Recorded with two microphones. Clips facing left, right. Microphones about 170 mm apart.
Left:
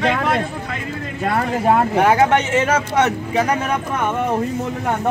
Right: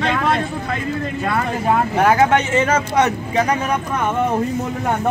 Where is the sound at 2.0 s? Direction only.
10° left (ahead or behind).